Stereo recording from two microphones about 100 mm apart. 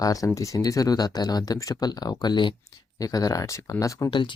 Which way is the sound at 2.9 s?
35° left (ahead or behind).